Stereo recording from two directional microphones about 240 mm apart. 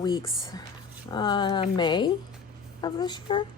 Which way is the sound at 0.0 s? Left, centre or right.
Centre.